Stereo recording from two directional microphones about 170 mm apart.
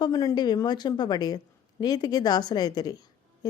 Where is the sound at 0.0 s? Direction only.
20° left (ahead or behind).